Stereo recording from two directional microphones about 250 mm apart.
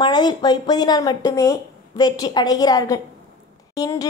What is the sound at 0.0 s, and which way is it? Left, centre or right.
Speech, centre.